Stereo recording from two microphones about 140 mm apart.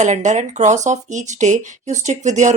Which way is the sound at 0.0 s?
60° right (ahead or behind).